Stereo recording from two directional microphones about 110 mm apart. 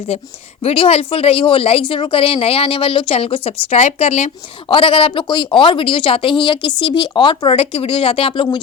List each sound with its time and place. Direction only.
0.6 s speech: 60° left (ahead or behind); by 4.3 s 85° left
4.7 s speech: 55° left (ahead or behind)